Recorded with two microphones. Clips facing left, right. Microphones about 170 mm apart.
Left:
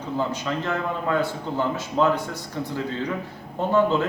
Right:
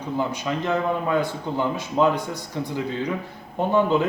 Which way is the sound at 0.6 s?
15° right (ahead or behind).